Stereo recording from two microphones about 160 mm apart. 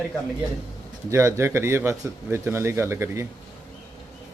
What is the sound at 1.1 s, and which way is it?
Speech, 15° right (ahead or behind).